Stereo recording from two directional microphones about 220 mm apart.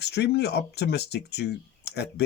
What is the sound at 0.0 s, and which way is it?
Speech, 50° left (ahead or behind).